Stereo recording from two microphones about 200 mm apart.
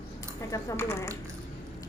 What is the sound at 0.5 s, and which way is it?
Speech, 15° left (ahead or behind).